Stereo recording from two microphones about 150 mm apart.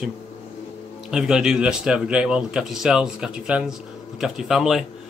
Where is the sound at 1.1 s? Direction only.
5° right (ahead or behind).